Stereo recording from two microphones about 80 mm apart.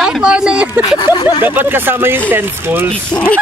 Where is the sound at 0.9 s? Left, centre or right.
Left.